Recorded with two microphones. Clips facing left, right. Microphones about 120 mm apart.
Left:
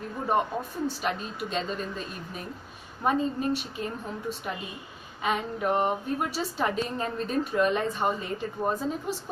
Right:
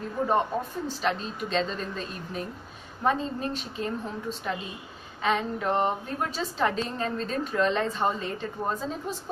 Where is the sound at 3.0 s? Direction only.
10° left (ahead or behind).